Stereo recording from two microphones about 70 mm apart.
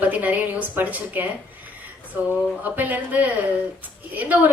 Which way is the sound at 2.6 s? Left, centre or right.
Right.